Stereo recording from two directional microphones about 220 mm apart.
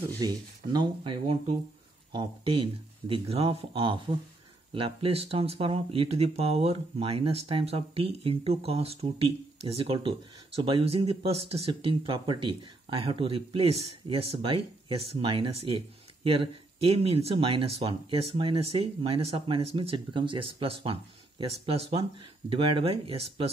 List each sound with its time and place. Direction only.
0.2 s speech: 20° right (ahead or behind)